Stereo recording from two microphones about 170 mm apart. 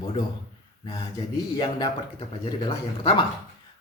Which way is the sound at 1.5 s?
25° left (ahead or behind).